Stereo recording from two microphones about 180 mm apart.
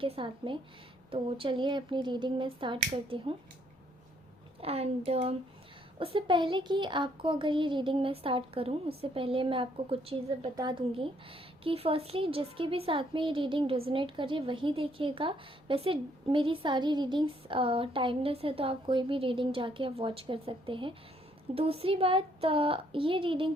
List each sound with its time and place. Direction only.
0.0 s a woman's voice: 30° right (ahead or behind)
4.6 s a woman's voice: 35° right (ahead or behind)